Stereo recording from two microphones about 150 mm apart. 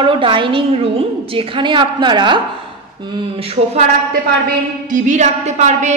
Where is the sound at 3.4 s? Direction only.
40° right (ahead or behind).